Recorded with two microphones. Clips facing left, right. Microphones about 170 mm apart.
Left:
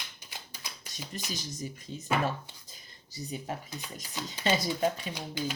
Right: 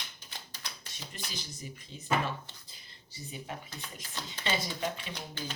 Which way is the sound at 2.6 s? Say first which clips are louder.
Left 3 dB; 40° left (ahead or behind).